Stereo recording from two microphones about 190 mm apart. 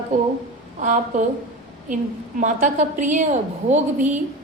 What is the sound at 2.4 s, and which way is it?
A woman's voice, 40° right (ahead or behind).